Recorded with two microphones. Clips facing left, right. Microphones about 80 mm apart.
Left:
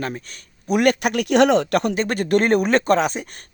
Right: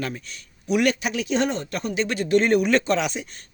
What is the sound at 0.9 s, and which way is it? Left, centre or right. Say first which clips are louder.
Speech: left 7 dB; left.